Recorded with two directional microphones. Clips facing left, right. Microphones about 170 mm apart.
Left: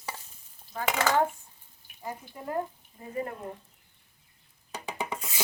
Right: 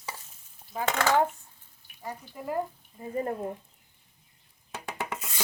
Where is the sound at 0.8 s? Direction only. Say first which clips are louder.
Right 1 dB; 10° left (ahead or behind).